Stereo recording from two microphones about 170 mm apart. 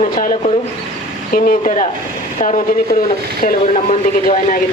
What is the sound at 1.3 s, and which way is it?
Speech, 55° left (ahead or behind).